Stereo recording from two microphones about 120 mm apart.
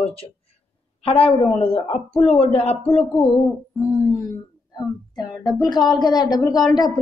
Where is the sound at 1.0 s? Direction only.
50° left (ahead or behind).